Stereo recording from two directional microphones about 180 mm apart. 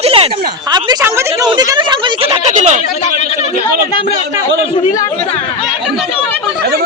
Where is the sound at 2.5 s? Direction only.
40° right (ahead or behind).